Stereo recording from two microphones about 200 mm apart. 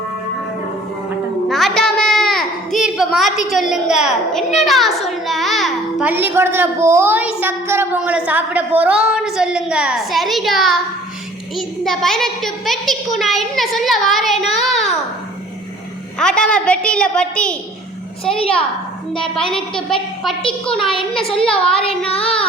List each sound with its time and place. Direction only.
1.5 s a sound: centre (ahead or behind)
4.6 s a child's voice: centre (ahead or behind)
16.1 s a child's voice: 5° left (ahead or behind)
21.5 s child singing: 30° left (ahead or behind)